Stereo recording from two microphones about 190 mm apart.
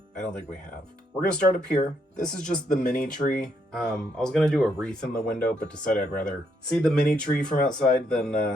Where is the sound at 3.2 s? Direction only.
45° left (ahead or behind).